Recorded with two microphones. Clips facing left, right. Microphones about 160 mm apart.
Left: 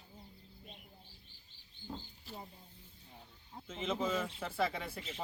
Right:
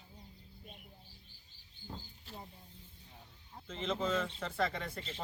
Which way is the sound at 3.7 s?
5° left (ahead or behind).